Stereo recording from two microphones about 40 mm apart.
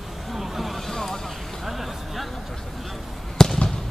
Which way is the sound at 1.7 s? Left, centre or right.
Centre.